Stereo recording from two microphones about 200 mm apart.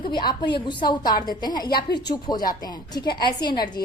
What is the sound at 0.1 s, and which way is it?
A woman's voice, 20° left (ahead or behind).